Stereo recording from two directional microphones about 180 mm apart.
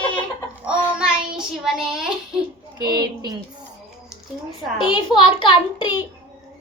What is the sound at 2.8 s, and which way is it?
Speech, 25° right (ahead or behind).